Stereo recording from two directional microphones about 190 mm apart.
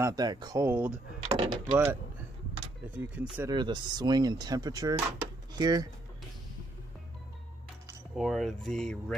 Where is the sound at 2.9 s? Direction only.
5° right (ahead or behind).